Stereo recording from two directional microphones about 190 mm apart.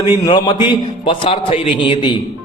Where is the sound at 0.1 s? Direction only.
25° left (ahead or behind).